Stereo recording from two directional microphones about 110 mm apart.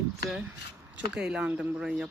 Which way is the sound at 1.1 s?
10° right (ahead or behind).